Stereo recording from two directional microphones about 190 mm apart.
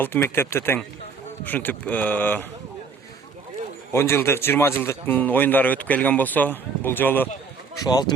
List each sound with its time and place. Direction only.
0.0 s speech: 10° left (ahead or behind)
3.9 s speech: 15° left (ahead or behind)
7.8 s speech: 20° left (ahead or behind)